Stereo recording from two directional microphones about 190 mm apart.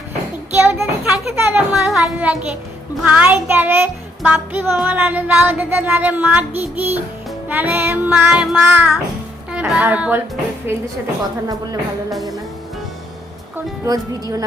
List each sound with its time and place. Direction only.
0.5 s a child's voice: 10° right (ahead or behind)
3.0 s music: 10° right (ahead or behind)
9.5 s speech: 5° right (ahead or behind)
10.7 s music: 10° right (ahead or behind)
13.8 s speech: 20° right (ahead or behind)